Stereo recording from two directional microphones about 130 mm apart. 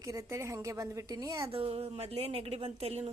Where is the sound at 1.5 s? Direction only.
50° right (ahead or behind).